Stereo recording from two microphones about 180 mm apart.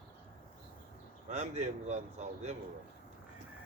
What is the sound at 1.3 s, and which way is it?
Speech, 40° right (ahead or behind).